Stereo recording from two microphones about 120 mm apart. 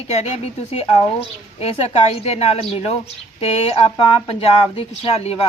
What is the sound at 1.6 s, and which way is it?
Speech, 60° left (ahead or behind).